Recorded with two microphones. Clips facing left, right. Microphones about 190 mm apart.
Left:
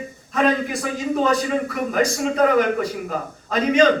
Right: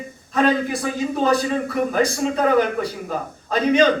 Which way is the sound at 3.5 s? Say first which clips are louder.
Even; 30° right (ahead or behind).